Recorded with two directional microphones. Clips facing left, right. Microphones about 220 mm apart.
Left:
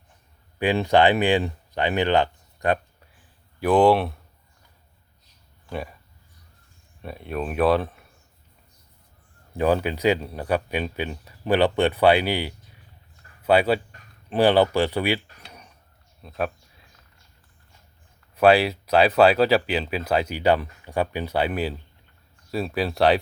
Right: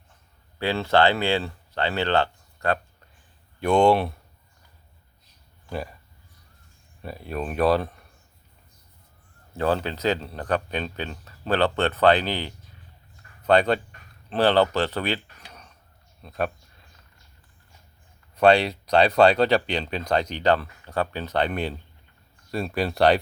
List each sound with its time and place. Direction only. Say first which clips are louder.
0.6 s speech: left 2 dB; 15° left (ahead or behind)
3.6 s speech: left 1 dB; 5° left (ahead or behind)
5.6 s speech: even; centre (ahead or behind)
7.0 s speech: left 1 dB; centre (ahead or behind)
9.6 s speech: left 3 dB; 10° left (ahead or behind)
16.2 s a sound: even; centre (ahead or behind)
18.3 s speech: left 1 dB; 5° left (ahead or behind)